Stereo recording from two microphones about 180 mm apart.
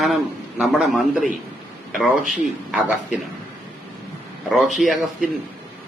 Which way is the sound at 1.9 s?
Centre (ahead or behind).